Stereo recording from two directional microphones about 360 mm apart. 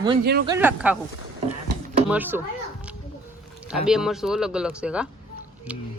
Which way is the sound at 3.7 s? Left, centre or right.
Centre.